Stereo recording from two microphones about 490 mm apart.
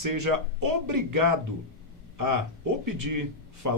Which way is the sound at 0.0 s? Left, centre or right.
Right.